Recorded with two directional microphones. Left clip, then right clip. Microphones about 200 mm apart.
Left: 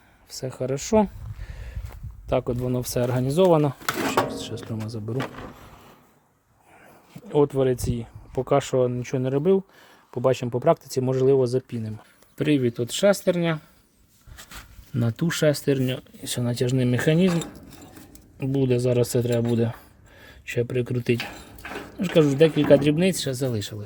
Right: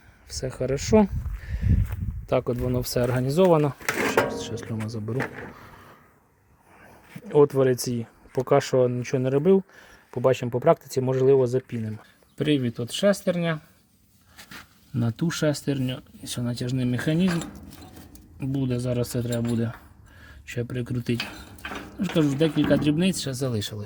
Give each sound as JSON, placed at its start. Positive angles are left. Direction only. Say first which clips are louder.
{"t": 0.3, "sound": "speech", "louder": "right 1 dB", "side_deg": 0}
{"t": 5.5, "sound": "a sound", "louder": "right 1 dB", "side_deg": 0}
{"t": 6.8, "sound": "speech", "louder": "right 2 dB", "side_deg": -5}
{"t": 14.9, "sound": "speech", "louder": "left 2 dB", "side_deg": 15}